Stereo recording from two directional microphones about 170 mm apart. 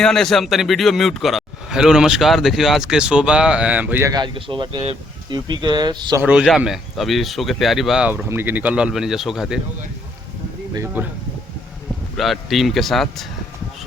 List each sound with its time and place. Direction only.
0.0 s a man's voice: 5° left (ahead or behind)
4.1 s speech: 30° right (ahead or behind)
6.2 s a man's voice: 5° right (ahead or behind)
11.0 s speech: 10° right (ahead or behind)
12.1 s a man's voice: centre (ahead or behind)